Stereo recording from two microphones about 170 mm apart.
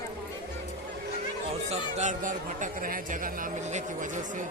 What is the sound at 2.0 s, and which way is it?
Speech, 45° right (ahead or behind).